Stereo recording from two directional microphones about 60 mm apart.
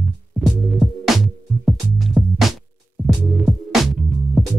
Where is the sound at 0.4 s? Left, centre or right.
Centre.